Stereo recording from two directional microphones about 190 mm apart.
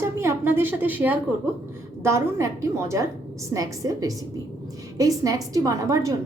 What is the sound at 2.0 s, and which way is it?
A woman's voice, 15° right (ahead or behind).